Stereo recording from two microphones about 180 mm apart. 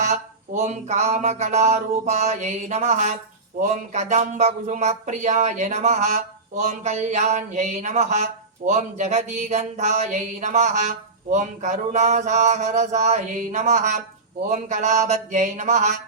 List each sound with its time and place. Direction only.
0.6 s speech: 40° right (ahead or behind)